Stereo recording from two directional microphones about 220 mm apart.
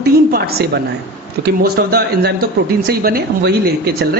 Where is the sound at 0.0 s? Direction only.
45° right (ahead or behind).